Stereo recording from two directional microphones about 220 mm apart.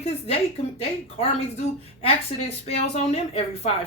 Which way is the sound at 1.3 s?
30° left (ahead or behind).